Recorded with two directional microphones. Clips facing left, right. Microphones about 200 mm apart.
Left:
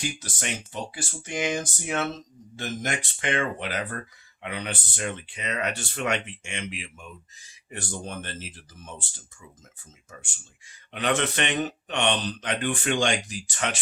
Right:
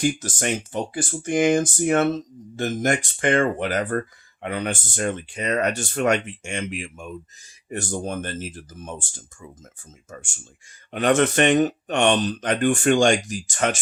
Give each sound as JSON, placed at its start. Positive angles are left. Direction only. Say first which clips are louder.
{"t": 0.0, "sound": "speech", "louder": "right 10 dB", "side_deg": -50}